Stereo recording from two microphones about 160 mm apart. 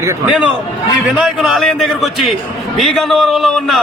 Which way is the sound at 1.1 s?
5° right (ahead or behind).